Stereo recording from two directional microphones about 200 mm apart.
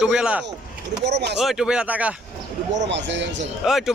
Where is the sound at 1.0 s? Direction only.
60° right (ahead or behind).